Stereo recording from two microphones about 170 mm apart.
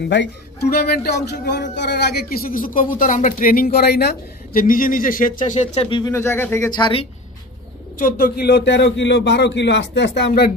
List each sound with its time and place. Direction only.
0.0 s speech: 85° left; by 6.1 s 30° left (ahead or behind)
6.1 s speech: 15° left (ahead or behind)
6.8 s speech: 35° left (ahead or behind)
8.0 s a man's voice: 65° left (ahead or behind)